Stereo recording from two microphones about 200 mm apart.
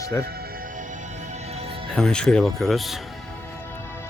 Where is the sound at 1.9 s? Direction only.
5° left (ahead or behind).